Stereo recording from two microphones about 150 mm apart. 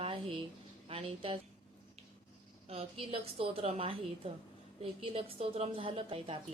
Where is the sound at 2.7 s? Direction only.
40° right (ahead or behind).